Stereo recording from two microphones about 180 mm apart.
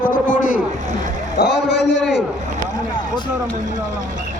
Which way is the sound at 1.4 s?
70° left (ahead or behind).